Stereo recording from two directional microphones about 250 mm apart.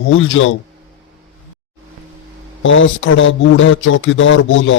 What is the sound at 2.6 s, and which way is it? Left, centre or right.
Mantra, left.